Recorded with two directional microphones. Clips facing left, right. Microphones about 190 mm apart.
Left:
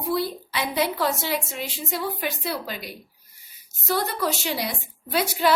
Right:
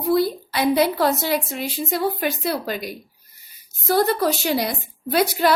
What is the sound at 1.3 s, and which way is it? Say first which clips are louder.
A woman's voice: right 5 dB; 60° right (ahead or behind).